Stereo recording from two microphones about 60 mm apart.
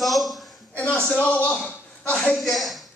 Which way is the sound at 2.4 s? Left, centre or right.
Centre.